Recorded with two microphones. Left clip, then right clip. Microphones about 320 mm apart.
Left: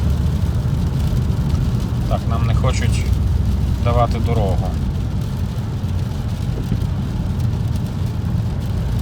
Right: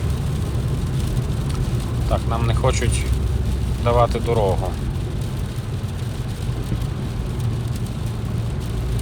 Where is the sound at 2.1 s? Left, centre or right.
Centre.